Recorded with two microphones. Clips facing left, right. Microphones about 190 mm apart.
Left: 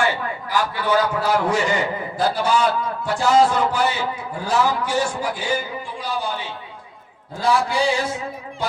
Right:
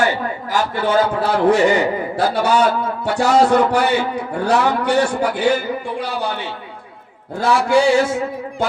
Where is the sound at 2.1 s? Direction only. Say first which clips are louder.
Right 3 dB; 70° right (ahead or behind).